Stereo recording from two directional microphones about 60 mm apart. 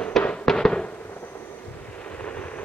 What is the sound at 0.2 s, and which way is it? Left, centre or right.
Fireworks, centre.